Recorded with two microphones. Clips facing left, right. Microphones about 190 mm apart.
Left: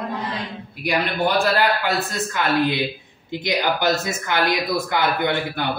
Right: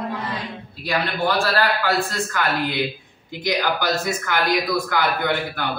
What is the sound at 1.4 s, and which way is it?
A man's voice, 20° left (ahead or behind).